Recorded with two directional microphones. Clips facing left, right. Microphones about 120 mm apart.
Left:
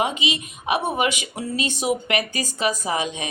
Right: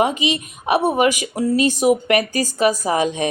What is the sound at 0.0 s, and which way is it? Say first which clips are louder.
Speech: right 5 dB; 45° right (ahead or behind).